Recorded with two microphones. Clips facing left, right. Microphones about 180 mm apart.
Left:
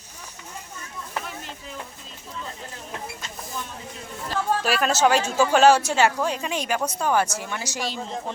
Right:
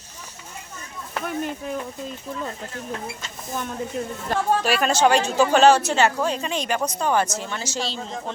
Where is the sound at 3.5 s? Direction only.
50° right (ahead or behind).